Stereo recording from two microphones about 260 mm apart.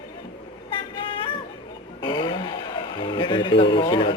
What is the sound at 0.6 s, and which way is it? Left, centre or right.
Vehicle, centre.